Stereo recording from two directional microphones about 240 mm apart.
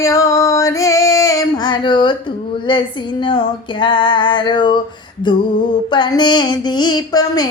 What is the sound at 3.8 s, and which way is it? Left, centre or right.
Music, centre.